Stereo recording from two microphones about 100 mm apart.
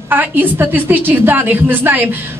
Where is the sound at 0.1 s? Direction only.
20° right (ahead or behind).